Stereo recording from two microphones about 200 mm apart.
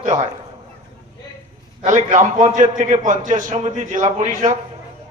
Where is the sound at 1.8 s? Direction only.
40° right (ahead or behind).